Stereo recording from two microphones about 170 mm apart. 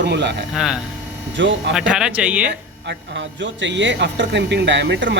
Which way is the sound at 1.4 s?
90° right.